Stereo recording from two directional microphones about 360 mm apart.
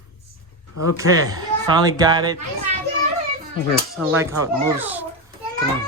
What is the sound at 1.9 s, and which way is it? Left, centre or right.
Speech, centre.